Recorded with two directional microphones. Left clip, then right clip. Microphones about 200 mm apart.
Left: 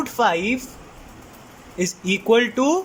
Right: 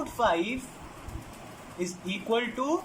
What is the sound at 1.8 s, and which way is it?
Speech, 55° left (ahead or behind).